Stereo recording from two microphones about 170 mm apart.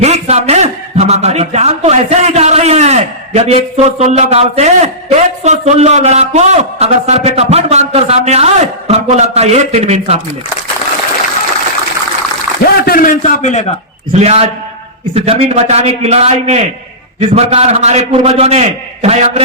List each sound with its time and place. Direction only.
0.0 s a man's voice: 40° right (ahead or behind)
12.7 s a man's voice: 65° left (ahead or behind); by 13.7 s 45° left (ahead or behind)
14.1 s a man's voice: 40° right (ahead or behind)